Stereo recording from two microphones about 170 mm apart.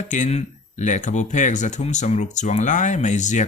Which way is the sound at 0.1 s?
45° left (ahead or behind).